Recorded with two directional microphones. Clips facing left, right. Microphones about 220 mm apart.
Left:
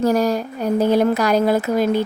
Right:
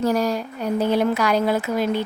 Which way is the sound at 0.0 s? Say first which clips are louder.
Left 3 dB; 45° left (ahead or behind).